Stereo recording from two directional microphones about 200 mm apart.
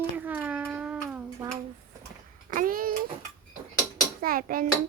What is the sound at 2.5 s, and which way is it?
Speech, 45° right (ahead or behind).